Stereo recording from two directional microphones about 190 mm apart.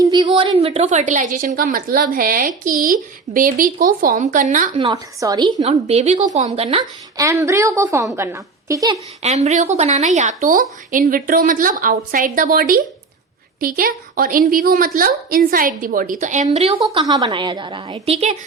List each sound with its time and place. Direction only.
0.0 s a woman's voice: 20° right (ahead or behind); by 4.7 s 45° right (ahead or behind)
4.7 s a woman's voice: 30° right (ahead or behind)
7.2 s a woman's voice: 15° right (ahead or behind)
9.2 s a woman's voice: 35° right (ahead or behind)